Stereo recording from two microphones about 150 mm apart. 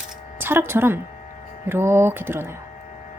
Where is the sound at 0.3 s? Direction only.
15° right (ahead or behind).